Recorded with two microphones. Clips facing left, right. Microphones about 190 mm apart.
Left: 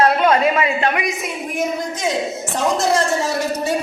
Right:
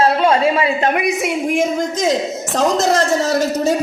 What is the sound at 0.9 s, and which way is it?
Speech, 60° right (ahead or behind).